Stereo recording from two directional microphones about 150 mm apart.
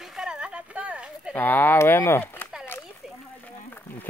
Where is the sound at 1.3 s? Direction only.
15° left (ahead or behind).